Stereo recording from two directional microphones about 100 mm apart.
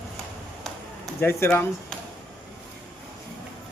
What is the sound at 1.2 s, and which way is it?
Speech, 25° left (ahead or behind).